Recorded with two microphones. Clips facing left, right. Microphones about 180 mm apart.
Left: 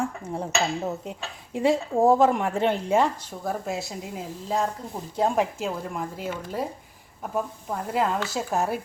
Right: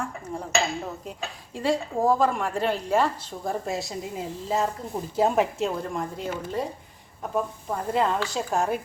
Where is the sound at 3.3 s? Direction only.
5° left (ahead or behind).